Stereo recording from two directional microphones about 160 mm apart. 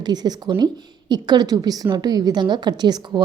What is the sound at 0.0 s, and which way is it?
A woman's voice, 25° right (ahead or behind).